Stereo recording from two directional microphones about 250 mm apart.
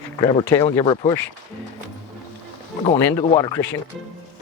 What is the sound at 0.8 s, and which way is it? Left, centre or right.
Speech, centre.